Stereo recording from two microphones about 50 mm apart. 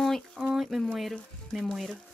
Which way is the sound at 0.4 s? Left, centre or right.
Centre.